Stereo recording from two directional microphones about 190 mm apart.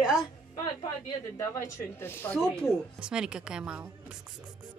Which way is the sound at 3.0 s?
5° right (ahead or behind).